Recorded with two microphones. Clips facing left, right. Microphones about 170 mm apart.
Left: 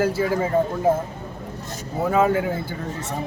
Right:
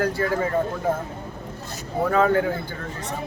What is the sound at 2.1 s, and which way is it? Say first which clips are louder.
Speech: even; 10° left (ahead or behind).